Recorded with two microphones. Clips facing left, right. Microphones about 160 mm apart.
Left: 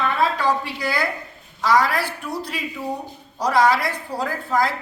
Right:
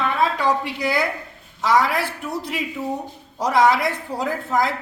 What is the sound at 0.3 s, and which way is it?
A woman's voice, 20° right (ahead or behind).